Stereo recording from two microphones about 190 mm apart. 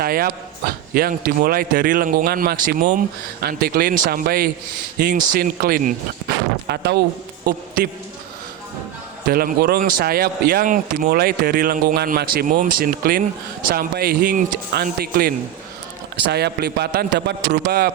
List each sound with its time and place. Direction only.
0.0 s a man's voice: 50° right (ahead or behind)
9.2 s a man's voice: 50° right (ahead or behind)